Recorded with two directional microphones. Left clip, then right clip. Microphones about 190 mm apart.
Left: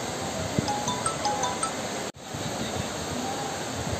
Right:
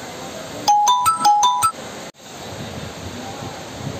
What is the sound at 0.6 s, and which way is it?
Music, 60° right (ahead or behind).